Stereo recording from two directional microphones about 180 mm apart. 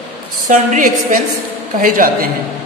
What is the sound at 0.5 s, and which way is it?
Speech, 45° right (ahead or behind).